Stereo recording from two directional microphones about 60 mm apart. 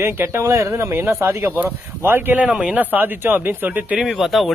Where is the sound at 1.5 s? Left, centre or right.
Right.